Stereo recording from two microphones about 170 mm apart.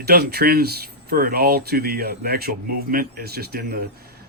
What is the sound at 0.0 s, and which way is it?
Speech, 70° right (ahead or behind).